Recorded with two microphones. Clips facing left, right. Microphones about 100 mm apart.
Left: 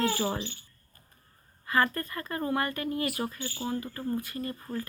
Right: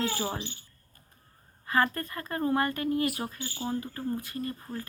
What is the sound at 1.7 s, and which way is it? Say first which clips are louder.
Speech: even; 15° right (ahead or behind).